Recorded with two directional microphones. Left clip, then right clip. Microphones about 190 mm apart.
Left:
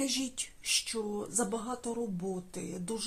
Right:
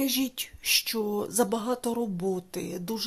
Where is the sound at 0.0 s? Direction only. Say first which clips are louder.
Right 5 dB; 35° right (ahead or behind).